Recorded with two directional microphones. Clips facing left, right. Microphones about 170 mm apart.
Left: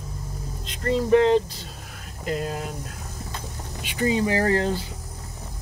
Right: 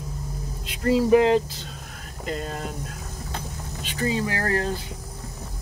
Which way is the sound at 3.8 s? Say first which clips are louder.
Left 3 dB; 15° left (ahead or behind).